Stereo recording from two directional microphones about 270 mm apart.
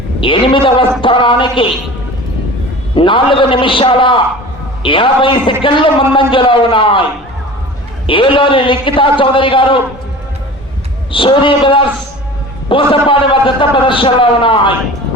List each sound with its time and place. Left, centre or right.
0.2 s a man's voice: centre
2.9 s a man's voice: centre
8.0 s a man's voice: centre
11.1 s a man's voice: centre